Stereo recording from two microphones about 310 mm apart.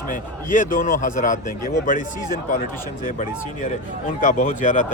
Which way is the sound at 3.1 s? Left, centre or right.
Left.